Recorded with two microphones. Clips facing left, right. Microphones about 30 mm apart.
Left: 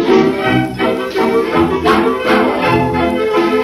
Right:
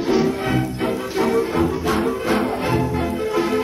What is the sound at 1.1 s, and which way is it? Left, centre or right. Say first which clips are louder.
Music: left 5 dB; left.